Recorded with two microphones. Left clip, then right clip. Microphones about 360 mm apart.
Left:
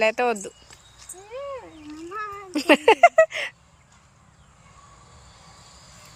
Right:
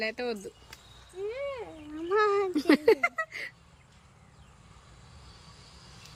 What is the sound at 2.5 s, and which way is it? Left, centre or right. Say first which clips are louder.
Speech: left 10 dB; centre.